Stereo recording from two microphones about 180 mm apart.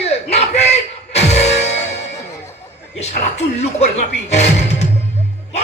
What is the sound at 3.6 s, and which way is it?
A man's voice, 40° left (ahead or behind).